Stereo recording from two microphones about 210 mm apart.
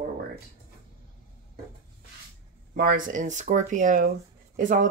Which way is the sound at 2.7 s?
45° right (ahead or behind).